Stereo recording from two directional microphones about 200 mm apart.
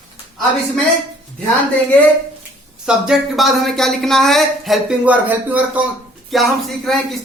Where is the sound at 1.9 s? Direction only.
5° left (ahead or behind).